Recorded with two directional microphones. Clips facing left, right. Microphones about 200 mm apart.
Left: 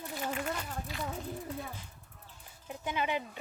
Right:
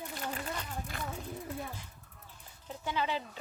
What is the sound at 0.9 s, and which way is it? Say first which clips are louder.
Speech: left 3 dB; 55° right (ahead or behind).